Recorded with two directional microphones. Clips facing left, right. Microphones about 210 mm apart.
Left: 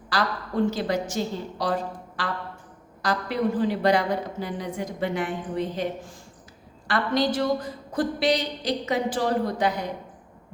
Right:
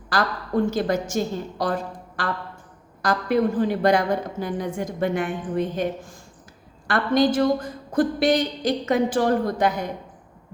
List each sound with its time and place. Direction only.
0.1 s a woman's voice: 50° right (ahead or behind)
6.8 s a woman's voice: 50° right (ahead or behind)